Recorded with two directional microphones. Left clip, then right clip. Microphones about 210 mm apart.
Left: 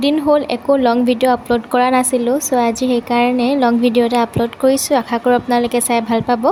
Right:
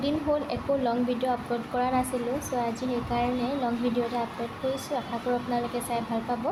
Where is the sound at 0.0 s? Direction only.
45° left (ahead or behind).